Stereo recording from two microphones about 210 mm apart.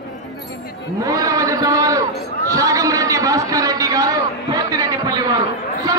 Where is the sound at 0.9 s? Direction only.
15° right (ahead or behind).